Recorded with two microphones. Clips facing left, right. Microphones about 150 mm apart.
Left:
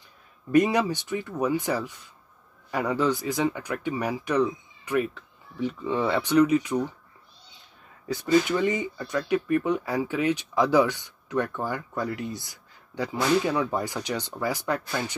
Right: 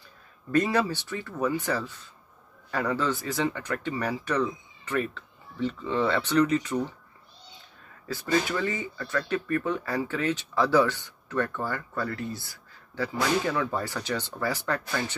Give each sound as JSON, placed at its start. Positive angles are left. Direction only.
{"t": 0.5, "sound": "speech", "side_deg": 15}
{"t": 8.1, "sound": "speech", "side_deg": 20}